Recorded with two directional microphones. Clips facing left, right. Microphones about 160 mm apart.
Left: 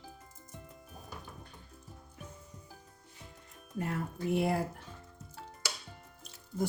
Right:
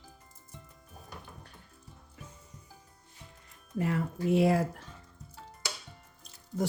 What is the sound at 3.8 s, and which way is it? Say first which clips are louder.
Speech: right 5 dB; 90° right.